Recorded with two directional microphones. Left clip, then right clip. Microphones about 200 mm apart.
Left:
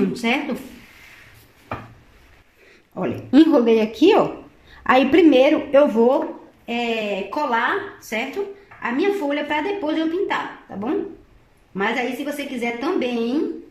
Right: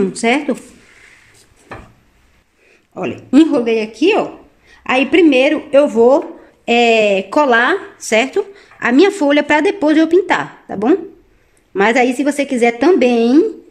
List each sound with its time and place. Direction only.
0.1 s speech: 30° right (ahead or behind)
2.9 s a woman's voice: 10° right (ahead or behind)
6.6 s a woman's voice: 50° right (ahead or behind)